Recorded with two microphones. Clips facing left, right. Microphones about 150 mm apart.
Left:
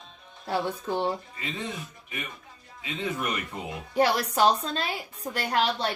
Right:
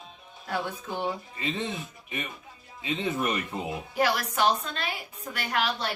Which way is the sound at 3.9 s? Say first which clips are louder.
Left 4 dB; 35° left (ahead or behind).